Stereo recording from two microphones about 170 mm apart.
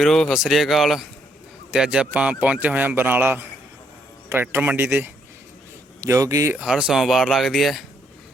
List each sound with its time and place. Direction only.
0.0 s speech: centre (ahead or behind); by 6.6 s 20° right (ahead or behind)
6.6 s speech: 5° right (ahead or behind)